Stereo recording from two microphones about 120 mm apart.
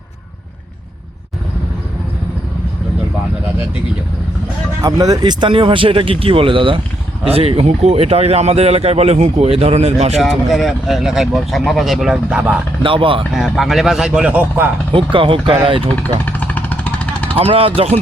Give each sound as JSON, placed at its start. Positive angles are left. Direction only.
{"t": 4.8, "sound": "speech", "side_deg": -30}
{"t": 10.2, "sound": "speech", "side_deg": 0}
{"t": 12.8, "sound": "speech", "side_deg": -45}
{"t": 13.3, "sound": "speech", "side_deg": 0}
{"t": 14.9, "sound": "speech", "side_deg": -45}
{"t": 16.0, "sound": "vehicle", "side_deg": 15}
{"t": 17.3, "sound": "speech", "side_deg": -55}